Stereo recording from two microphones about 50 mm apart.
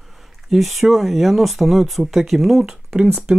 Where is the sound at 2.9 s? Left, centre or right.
Centre.